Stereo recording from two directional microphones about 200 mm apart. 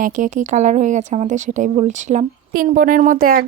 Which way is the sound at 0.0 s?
40° right (ahead or behind).